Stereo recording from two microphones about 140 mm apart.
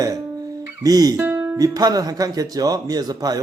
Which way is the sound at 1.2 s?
15° right (ahead or behind).